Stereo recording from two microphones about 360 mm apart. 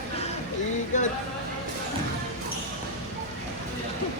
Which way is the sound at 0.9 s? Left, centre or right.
Centre.